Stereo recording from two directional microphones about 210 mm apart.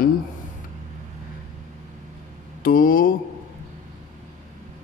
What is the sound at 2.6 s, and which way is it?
Speech, 40° left (ahead or behind).